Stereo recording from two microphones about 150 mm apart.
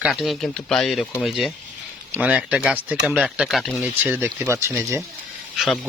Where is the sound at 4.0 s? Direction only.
15° right (ahead or behind).